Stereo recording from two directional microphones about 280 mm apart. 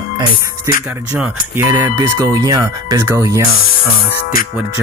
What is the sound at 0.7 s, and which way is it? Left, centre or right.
Speech, centre.